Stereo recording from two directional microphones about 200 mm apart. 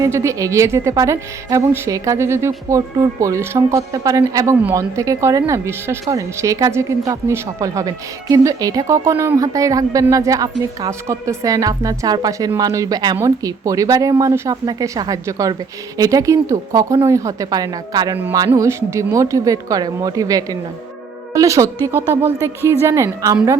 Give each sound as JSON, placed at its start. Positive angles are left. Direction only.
{"t": 0.0, "sound": "speech", "side_deg": -15}